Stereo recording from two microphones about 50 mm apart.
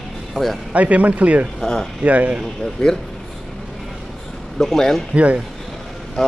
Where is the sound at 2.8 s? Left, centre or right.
Centre.